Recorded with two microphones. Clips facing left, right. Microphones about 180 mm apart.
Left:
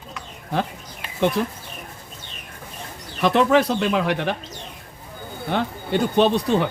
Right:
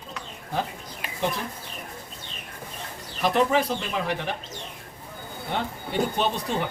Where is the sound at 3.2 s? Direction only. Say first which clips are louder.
Left 5 dB; 80° left.